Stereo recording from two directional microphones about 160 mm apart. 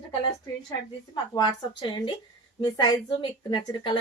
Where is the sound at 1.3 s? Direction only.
30° left (ahead or behind).